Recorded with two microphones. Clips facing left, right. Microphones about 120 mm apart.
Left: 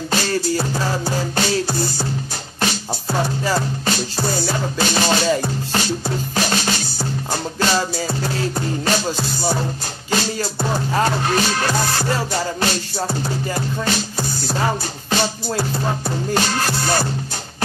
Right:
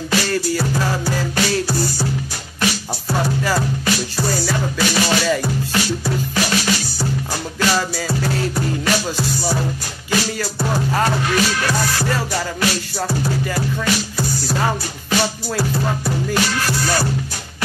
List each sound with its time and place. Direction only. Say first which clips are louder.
0.1 s music: right 1 dB; 30° left (ahead or behind)